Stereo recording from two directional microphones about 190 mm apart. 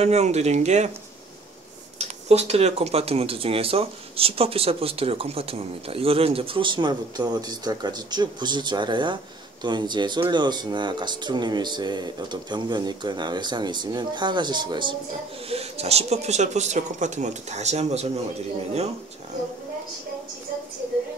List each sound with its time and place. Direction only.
0.0 s speech: 35° right (ahead or behind)
2.0 s speech: 35° right (ahead or behind)